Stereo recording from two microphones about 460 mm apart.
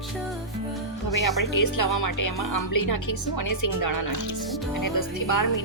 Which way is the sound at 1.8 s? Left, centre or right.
Left.